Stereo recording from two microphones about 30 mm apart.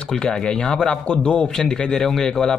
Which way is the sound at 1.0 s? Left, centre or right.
Left.